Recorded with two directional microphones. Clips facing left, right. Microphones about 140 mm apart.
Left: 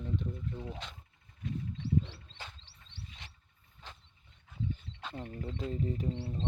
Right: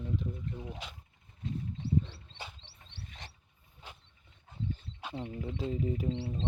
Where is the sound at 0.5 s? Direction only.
10° right (ahead or behind).